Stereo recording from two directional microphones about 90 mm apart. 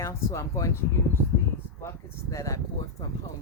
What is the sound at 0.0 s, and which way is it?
Speech, 35° left (ahead or behind).